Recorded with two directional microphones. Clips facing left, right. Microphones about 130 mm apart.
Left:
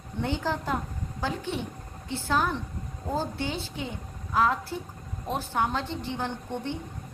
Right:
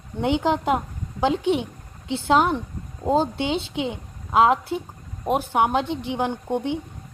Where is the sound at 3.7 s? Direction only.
70° right (ahead or behind).